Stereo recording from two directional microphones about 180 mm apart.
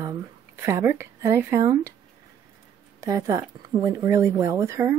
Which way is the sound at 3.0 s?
20° right (ahead or behind).